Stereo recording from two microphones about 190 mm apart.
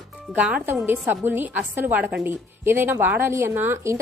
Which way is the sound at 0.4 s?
5° right (ahead or behind).